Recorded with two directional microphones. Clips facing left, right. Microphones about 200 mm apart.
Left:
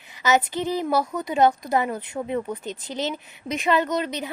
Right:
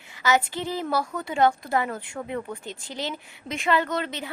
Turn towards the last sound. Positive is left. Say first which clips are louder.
# left 3 dB
turn(degrees=20)  # may be behind; listen again after turning